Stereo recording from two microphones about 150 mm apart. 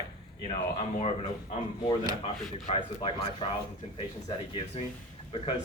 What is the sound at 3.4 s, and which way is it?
Speech, 30° left (ahead or behind).